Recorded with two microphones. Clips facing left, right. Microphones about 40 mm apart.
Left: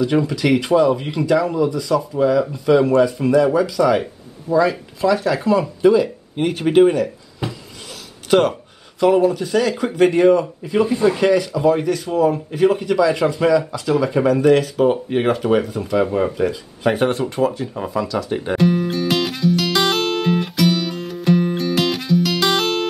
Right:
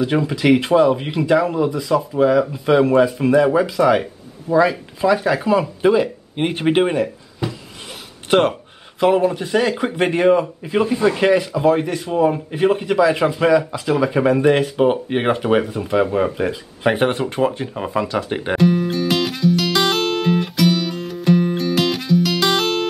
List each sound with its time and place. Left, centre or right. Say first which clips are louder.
0.0 s speech: even; right
8.3 s speech: even; right
10.9 s speech: even; centre
11.1 s speech: even; right
18.6 s music: right 1 dB; centre